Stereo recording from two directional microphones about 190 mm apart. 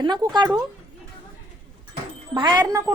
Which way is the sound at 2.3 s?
20° right (ahead or behind).